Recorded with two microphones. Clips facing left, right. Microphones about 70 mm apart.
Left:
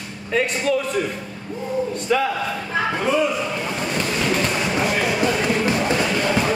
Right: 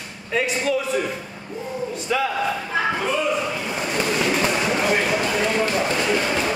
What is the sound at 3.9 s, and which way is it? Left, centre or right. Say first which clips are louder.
Fireworks: right 1 dB; centre.